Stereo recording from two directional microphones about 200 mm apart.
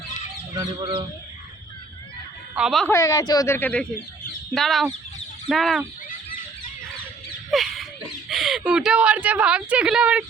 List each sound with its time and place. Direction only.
0.5 s speech: 20° right (ahead or behind)
2.6 s a woman's voice: centre (ahead or behind)
2.9 s a woman's voice: 15° left (ahead or behind); by 5.8 s centre (ahead or behind)
7.5 s a sound: centre (ahead or behind)
8.3 s a woman's voice: centre (ahead or behind)